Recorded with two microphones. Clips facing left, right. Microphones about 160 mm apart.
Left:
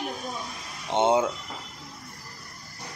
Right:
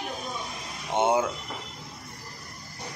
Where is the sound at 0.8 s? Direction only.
20° left (ahead or behind).